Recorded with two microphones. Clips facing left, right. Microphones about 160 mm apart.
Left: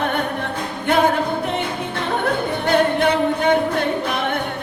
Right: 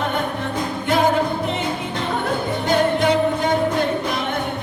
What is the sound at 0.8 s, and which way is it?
Music, 60° left (ahead or behind).